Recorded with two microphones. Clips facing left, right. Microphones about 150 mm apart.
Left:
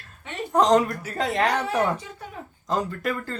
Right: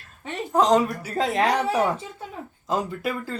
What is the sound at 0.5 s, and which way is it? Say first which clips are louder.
Speech: even; centre (ahead or behind).